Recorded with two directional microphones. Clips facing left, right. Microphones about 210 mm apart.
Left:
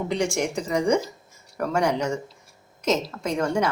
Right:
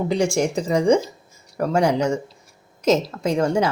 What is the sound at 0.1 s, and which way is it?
Speech, 30° right (ahead or behind).